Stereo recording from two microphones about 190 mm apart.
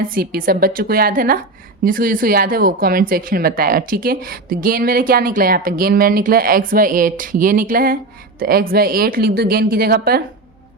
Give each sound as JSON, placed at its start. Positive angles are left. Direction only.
{"t": 0.0, "sound": "speech", "side_deg": -50}